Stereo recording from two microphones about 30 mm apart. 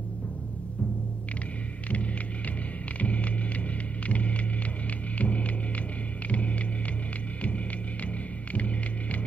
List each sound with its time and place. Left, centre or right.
3.0 s music: left